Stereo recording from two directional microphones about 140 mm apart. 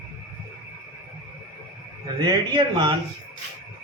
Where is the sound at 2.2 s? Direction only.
30° right (ahead or behind).